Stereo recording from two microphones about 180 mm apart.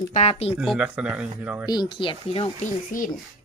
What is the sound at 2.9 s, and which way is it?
Speech, 50° left (ahead or behind).